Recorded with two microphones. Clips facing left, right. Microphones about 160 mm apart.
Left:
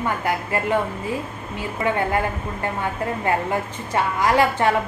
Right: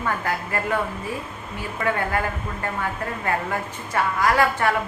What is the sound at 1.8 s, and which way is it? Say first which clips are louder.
Speech: left 2 dB; 20° left (ahead or behind).